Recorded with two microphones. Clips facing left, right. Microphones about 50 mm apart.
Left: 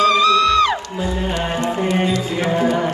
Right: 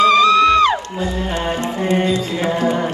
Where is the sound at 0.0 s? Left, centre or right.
Right.